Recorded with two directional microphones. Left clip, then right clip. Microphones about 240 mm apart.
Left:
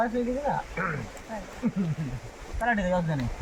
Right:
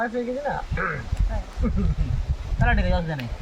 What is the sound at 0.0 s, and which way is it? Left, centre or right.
Speech, centre.